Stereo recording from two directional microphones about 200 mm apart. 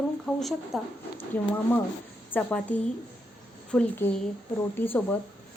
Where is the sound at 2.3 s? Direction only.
10° left (ahead or behind).